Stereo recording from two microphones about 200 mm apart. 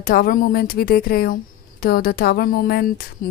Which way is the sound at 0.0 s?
45° left (ahead or behind).